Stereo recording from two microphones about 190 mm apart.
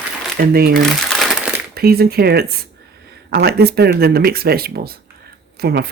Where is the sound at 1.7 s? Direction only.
55° right (ahead or behind).